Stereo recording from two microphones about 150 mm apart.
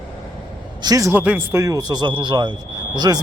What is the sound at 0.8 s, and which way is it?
Speech, 25° right (ahead or behind).